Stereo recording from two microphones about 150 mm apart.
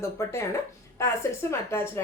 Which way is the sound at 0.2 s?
20° left (ahead or behind).